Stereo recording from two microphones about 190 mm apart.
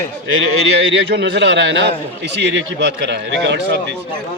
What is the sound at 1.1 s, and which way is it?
A man's voice, 65° right (ahead or behind).